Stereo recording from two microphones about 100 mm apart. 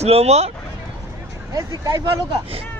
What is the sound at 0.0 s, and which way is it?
Speech, 90° right.